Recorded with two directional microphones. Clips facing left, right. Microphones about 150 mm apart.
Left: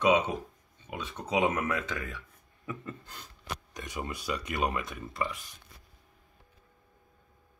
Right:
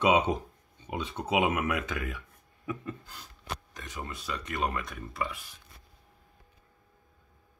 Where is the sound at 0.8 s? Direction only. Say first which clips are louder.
Right 4 dB; 15° right (ahead or behind).